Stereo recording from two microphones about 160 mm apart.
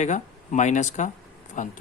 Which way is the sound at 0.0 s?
50° left (ahead or behind).